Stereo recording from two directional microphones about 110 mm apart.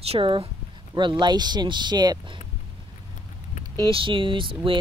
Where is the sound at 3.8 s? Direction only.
50° right (ahead or behind).